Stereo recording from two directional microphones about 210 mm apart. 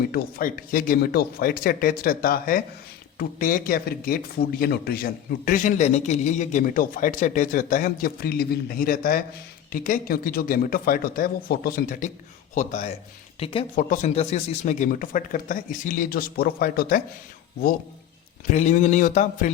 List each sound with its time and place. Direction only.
0.1 s a man's voice: 45° left (ahead or behind)
18.5 s speech: 35° left (ahead or behind)